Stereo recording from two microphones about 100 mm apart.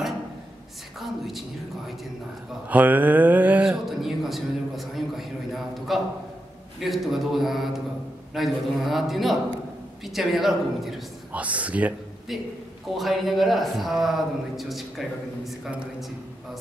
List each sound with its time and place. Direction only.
0.9 s a sound: centre (ahead or behind)
2.7 s speech: 15° right (ahead or behind)
3.6 s a man's voice: centre (ahead or behind)
11.3 s speech: 15° right (ahead or behind)
12.9 s a man's voice: centre (ahead or behind)